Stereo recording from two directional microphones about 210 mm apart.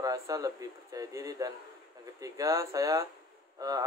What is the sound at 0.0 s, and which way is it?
A man's voice, 15° right (ahead or behind).